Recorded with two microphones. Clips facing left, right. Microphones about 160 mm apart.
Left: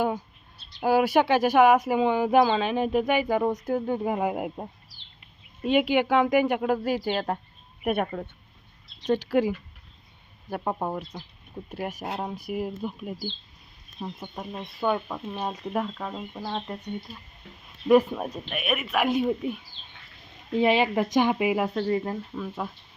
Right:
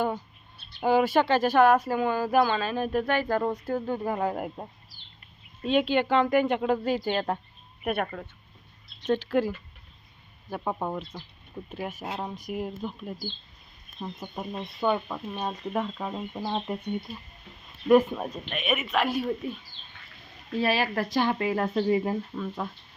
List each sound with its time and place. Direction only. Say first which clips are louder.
0.8 s speech: left 1 dB; 5° left (ahead or behind)
8.0 s speech: left 4 dB; 20° left (ahead or behind); by 13.1 s 5° left (ahead or behind)
14.2 s speech: right 1 dB; centre (ahead or behind)
15.8 s speech: even; 5° right (ahead or behind)
17.8 s speech: left 1 dB; centre (ahead or behind)
18.9 s speech: left 5 dB; 20° left (ahead or behind)
21.7 s speech: right 2 dB; 5° right (ahead or behind)
22.4 s speech: even; 5° left (ahead or behind)